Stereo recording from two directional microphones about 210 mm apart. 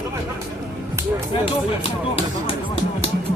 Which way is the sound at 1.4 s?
25° left (ahead or behind).